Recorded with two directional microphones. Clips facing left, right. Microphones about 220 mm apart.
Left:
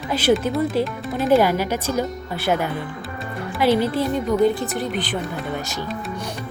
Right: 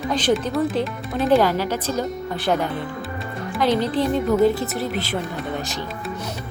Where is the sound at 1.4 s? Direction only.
15° left (ahead or behind).